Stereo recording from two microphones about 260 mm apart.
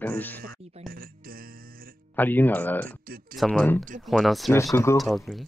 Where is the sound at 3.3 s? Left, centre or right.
Centre.